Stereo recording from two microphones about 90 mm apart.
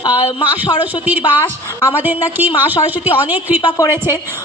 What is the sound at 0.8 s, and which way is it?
A woman's voice, 20° right (ahead or behind).